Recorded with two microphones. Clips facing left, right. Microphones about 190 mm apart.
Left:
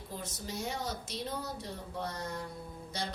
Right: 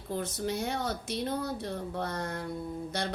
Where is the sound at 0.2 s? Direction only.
60° right (ahead or behind).